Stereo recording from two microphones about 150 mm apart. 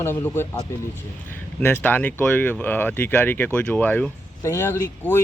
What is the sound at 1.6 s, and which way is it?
Speech, 15° left (ahead or behind).